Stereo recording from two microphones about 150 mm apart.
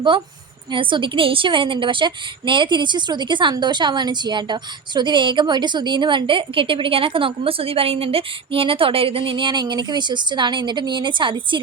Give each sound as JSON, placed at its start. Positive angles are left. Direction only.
{"t": 0.7, "sound": "a woman's voice", "side_deg": -35}